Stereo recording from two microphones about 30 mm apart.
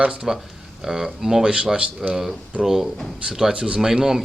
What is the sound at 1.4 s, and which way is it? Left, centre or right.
Speech, right.